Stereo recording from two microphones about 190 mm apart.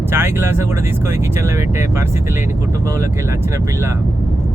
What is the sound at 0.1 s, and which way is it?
Speech, 10° right (ahead or behind).